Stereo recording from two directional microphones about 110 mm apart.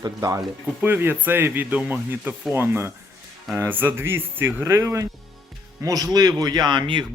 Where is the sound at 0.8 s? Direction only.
20° right (ahead or behind).